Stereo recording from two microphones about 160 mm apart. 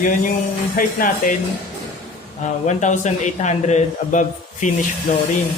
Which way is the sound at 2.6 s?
50° left (ahead or behind).